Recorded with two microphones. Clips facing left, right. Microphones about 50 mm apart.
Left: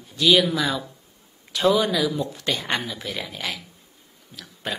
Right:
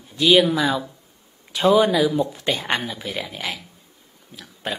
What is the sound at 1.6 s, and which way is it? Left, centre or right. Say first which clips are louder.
Speech: right 4 dB; right.